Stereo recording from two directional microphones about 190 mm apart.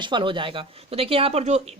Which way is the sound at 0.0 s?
25° right (ahead or behind).